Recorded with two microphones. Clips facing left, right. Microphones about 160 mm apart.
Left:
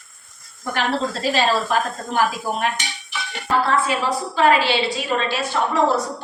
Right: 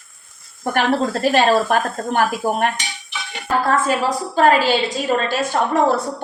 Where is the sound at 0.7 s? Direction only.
55° right (ahead or behind).